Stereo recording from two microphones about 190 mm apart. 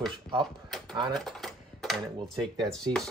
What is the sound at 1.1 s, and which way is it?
Dishes, centre (ahead or behind).